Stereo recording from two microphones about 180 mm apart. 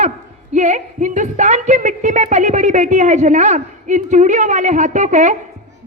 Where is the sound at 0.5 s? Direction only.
40° right (ahead or behind).